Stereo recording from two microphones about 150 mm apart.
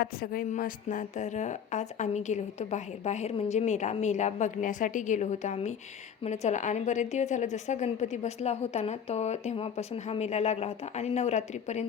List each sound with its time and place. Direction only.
0.0 s a woman's voice: 75° left (ahead or behind); by 11.9 s 50° left (ahead or behind)